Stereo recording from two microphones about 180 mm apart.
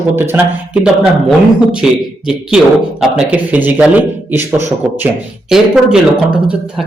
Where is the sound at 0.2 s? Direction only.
10° right (ahead or behind).